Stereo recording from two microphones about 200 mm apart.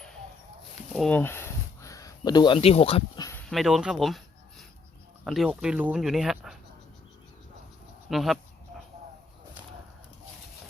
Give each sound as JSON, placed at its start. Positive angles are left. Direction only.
{"t": 0.9, "sound": "speech", "side_deg": 5}
{"t": 3.5, "sound": "speech", "side_deg": 0}
{"t": 8.1, "sound": "speech", "side_deg": 0}